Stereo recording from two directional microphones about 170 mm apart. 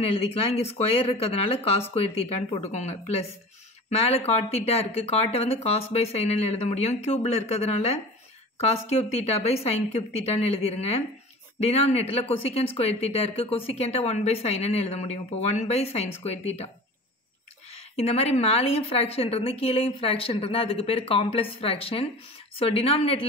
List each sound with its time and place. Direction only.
0.0 s speech: 35° left (ahead or behind)
17.7 s speech: 35° left (ahead or behind)